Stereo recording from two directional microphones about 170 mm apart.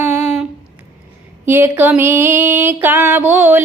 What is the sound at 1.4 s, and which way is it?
Music, 10° right (ahead or behind).